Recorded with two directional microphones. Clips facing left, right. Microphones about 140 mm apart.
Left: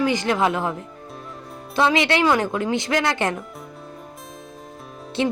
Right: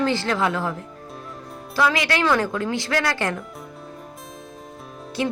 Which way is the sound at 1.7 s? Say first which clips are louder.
Left 3 dB; 25° left (ahead or behind).